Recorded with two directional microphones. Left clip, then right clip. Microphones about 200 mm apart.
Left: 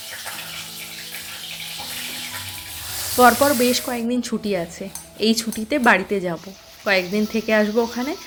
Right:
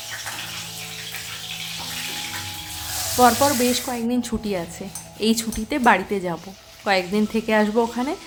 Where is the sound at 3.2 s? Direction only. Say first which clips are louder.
Left 2 dB; 10° left (ahead or behind).